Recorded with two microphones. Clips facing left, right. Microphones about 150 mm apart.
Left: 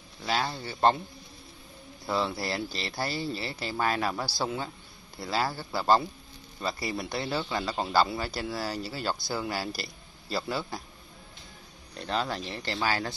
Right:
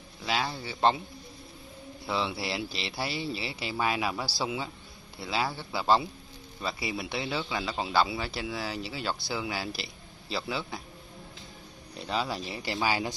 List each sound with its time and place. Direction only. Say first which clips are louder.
0.2 s speech: left 1 dB; centre (ahead or behind)
2.0 s speech: left 2 dB; centre (ahead or behind)
12.0 s speech: left 1 dB; 5° right (ahead or behind)